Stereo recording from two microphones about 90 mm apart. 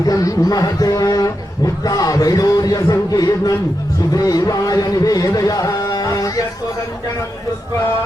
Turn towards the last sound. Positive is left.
turn(degrees=40)  # may be behind; listen again after turning